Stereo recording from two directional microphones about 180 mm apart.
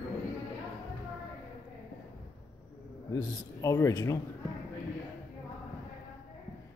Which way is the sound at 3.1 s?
15° left (ahead or behind).